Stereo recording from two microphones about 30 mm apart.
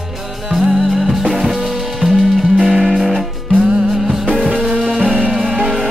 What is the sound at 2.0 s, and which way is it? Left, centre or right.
Music, right.